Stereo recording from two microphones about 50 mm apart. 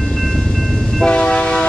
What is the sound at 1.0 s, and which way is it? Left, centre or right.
Train, centre.